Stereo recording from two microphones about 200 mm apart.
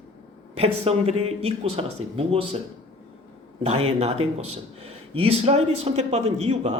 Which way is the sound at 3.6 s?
30° right (ahead or behind).